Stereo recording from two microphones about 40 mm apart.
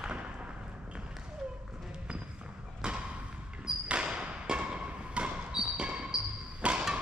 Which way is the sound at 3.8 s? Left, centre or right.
Right.